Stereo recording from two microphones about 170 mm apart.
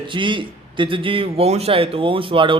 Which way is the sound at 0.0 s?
30° right (ahead or behind).